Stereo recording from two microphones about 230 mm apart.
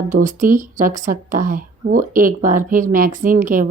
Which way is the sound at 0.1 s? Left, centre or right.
Right.